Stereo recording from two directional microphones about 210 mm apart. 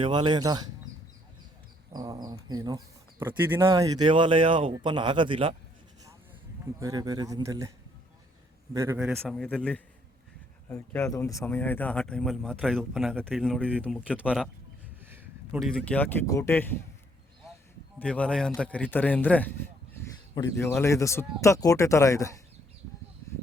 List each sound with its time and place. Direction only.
0.0 s speech: 20° right (ahead or behind)
1.9 s speech: 20° right (ahead or behind)
6.7 s speech: 15° right (ahead or behind)
8.7 s speech: 15° right (ahead or behind)
15.0 s a sound: 10° right (ahead or behind)
15.6 s a man's voice: 5° left (ahead or behind)
18.0 s a man's voice: 5° left (ahead or behind)